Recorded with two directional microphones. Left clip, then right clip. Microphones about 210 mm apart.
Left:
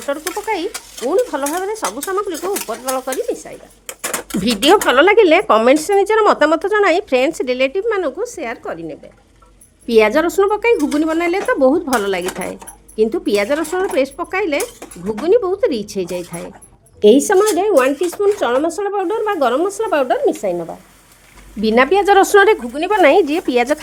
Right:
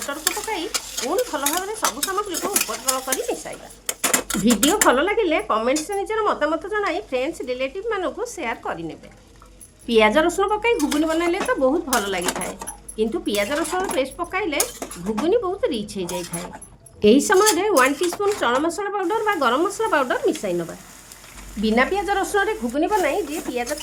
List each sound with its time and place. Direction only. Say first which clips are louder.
0.1 s a woman's voice: left 7 dB; 35° left (ahead or behind)
4.9 s speech: left 8 dB; 55° left (ahead or behind); by 9.0 s 15° left (ahead or behind)
9.8 s a woman's voice: left 4 dB; 30° left (ahead or behind)
17.0 s speech: left 5 dB; 15° left (ahead or behind)
21.6 s speech: left 7 dB; 35° left (ahead or behind); by 23.7 s 55° left (ahead or behind)